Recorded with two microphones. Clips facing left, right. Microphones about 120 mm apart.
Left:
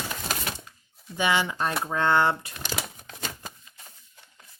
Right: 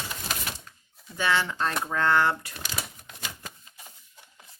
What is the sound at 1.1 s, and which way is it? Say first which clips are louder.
Speech: left 1 dB; 15° left (ahead or behind).